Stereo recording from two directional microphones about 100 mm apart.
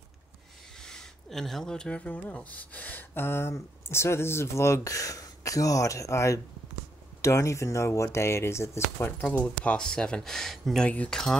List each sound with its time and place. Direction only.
0.8 s speech: 5° left (ahead or behind); by 9.1 s 30° left (ahead or behind)
9.2 s speech: 15° left (ahead or behind)